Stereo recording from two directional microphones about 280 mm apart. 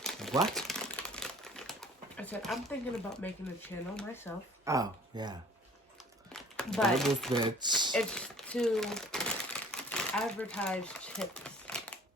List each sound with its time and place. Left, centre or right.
0.0 s crumpling: centre
3.9 s speech: centre
4.6 s speech: centre
6.3 s speech: centre
7.3 s speech: centre
7.9 s crumpling: centre